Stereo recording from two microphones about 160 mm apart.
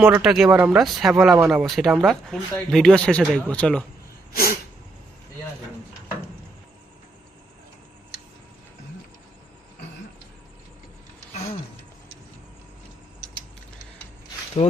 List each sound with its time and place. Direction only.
0.0 s speech: 5° right (ahead or behind)
4.4 s a sound: 70° left (ahead or behind)
14.6 s speech: 40° left (ahead or behind)